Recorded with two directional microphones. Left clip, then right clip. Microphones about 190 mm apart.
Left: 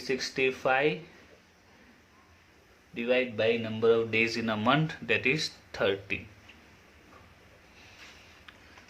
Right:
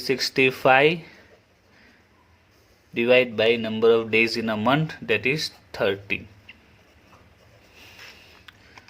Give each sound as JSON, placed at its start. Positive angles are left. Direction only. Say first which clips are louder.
{"t": 0.0, "sound": "speech", "louder": "right 8 dB", "side_deg": -50}
{"t": 2.9, "sound": "speech", "louder": "right 9 dB", "side_deg": -50}